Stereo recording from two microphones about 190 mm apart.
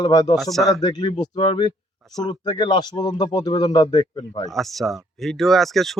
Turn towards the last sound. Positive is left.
turn(degrees=0)  # may be behind; listen again after turning